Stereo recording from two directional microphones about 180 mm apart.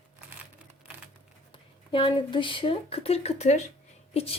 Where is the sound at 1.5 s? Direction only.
30° left (ahead or behind).